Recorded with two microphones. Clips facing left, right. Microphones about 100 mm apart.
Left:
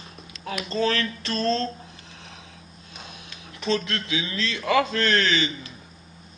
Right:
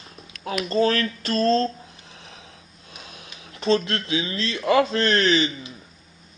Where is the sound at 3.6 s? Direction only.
35° right (ahead or behind).